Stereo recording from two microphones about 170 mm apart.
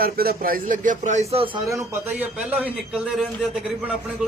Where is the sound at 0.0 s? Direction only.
60° right (ahead or behind).